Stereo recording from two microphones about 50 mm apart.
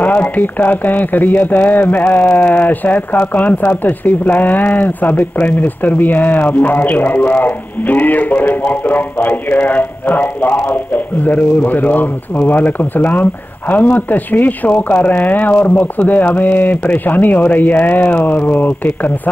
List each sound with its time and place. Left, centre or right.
0.0 s speech: left